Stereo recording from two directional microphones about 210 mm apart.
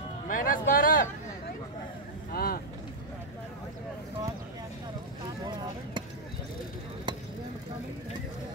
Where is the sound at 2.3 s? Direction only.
45° left (ahead or behind).